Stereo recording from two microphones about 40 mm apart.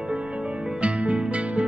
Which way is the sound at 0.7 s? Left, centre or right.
Right.